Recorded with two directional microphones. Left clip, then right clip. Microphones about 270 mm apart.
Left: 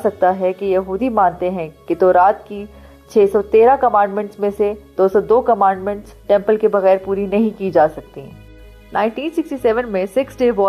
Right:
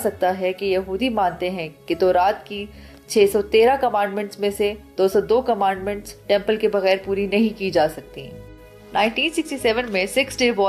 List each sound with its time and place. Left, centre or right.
0.0 s a woman's voice: centre
9.4 s a woman's voice: centre
9.7 s a woman's voice: left